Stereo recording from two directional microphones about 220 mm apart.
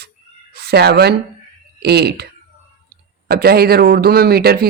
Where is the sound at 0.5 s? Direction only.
45° right (ahead or behind).